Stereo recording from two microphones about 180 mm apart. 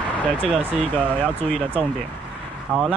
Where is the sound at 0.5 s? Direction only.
10° right (ahead or behind).